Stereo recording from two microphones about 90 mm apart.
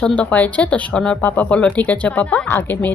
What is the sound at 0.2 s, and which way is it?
Speech, 15° left (ahead or behind).